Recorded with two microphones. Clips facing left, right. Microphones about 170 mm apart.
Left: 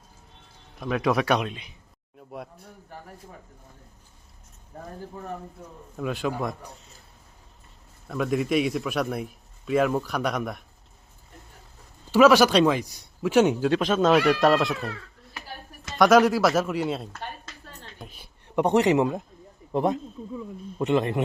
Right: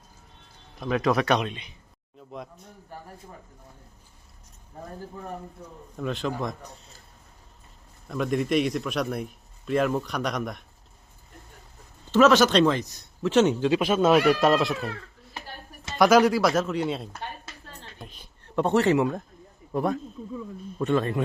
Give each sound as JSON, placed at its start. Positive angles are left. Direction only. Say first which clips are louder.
{"t": 0.8, "sound": "a man's voice", "louder": "even", "side_deg": 0}
{"t": 6.0, "sound": "a man's voice", "louder": "left 1 dB", "side_deg": 5}
{"t": 8.0, "sound": "a man's voice", "louder": "left 1 dB", "side_deg": 0}
{"t": 12.1, "sound": "a man's voice", "louder": "left 1 dB", "side_deg": 10}
{"t": 13.7, "sound": "a man's voice", "louder": "even", "side_deg": -10}
{"t": 16.0, "sound": "a man's voice", "louder": "left 1 dB", "side_deg": 0}